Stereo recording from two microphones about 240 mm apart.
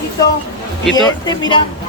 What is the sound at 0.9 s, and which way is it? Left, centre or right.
Speech, centre.